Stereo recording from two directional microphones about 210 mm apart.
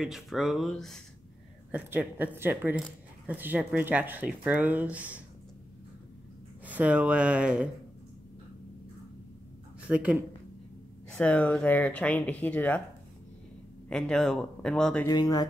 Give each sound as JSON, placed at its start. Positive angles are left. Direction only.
{"t": 0.0, "sound": "speech", "side_deg": 0}
{"t": 6.6, "sound": "speech", "side_deg": -5}
{"t": 9.8, "sound": "speech", "side_deg": -5}
{"t": 11.1, "sound": "speech", "side_deg": 5}
{"t": 13.8, "sound": "speech", "side_deg": 5}
{"t": 15.0, "sound": "speech", "side_deg": 20}